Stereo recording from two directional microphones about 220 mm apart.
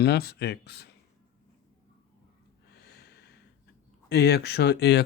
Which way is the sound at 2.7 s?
45° left (ahead or behind).